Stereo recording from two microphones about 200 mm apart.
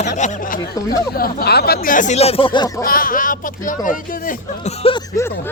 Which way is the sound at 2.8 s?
45° left (ahead or behind).